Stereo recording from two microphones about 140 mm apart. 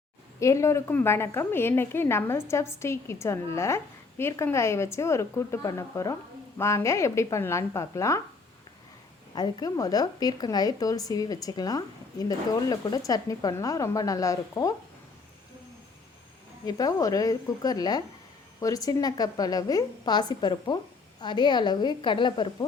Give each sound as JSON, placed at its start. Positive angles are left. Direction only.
{"t": 0.3, "sound": "a woman's voice", "side_deg": 20}
{"t": 9.3, "sound": "a woman's voice", "side_deg": 30}
{"t": 16.6, "sound": "a woman's voice", "side_deg": 25}